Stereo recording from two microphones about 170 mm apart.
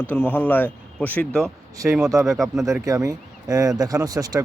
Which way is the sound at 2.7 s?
20° right (ahead or behind).